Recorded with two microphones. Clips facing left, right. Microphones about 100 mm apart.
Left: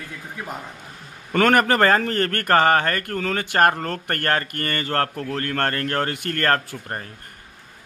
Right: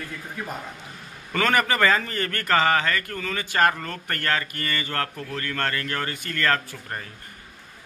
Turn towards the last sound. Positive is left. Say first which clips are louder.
# left 3 dB
turn(degrees=45)  # may be behind; listen again after turning